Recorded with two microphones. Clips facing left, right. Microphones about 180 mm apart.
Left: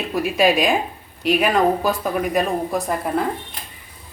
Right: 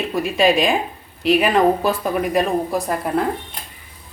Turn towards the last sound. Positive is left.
turn(degrees=0)  # may be behind; listen again after turning